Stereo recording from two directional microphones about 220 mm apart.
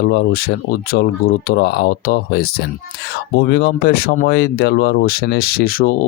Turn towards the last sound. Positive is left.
turn(degrees=40)  # may be behind; listen again after turning